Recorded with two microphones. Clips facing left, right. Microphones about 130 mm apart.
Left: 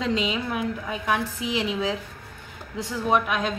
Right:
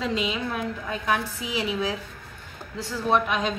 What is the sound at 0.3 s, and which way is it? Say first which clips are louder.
A woman's voice: left 2 dB; 10° left (ahead or behind).